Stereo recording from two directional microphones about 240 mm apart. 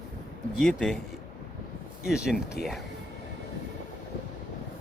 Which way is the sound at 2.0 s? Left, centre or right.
Centre.